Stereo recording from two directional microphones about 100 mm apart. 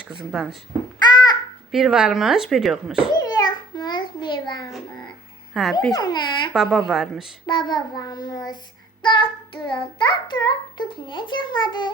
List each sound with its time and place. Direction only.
0.3 s speech: 5° right (ahead or behind)
1.0 s babbling: 45° left (ahead or behind)
1.7 s speech: 5° right (ahead or behind)
3.2 s a sound: 45° left (ahead or behind)
5.5 s speech: centre (ahead or behind)
5.9 s child singing: 45° left (ahead or behind)
6.5 s speech: centre (ahead or behind)
7.4 s child singing: 50° left (ahead or behind)